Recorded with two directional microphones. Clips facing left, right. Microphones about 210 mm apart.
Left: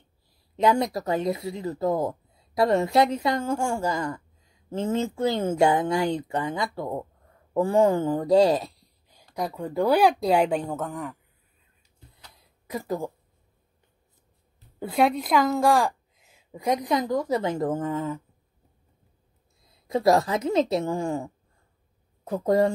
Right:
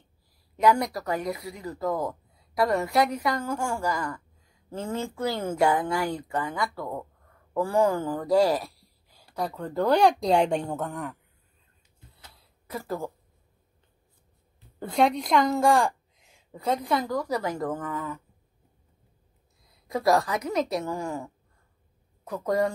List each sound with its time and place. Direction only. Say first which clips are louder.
0.6 s speech: left 1 dB; 25° left (ahead or behind); by 11.1 s centre (ahead or behind)
12.6 s speech: left 3 dB; 15° left (ahead or behind)
14.8 s speech: left 1 dB; 5° left (ahead or behind); by 18.2 s 25° left (ahead or behind)
19.7 s speech: left 3 dB; 25° left (ahead or behind)